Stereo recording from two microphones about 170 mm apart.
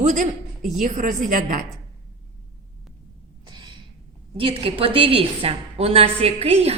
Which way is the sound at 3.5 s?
25° right (ahead or behind).